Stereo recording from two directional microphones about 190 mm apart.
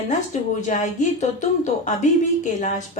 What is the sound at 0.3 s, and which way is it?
A woman's voice, 40° left (ahead or behind).